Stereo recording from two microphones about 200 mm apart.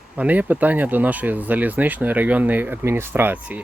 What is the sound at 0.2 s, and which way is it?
Speech, 10° right (ahead or behind).